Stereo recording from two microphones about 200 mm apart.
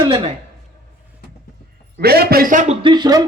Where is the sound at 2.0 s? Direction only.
50° right (ahead or behind).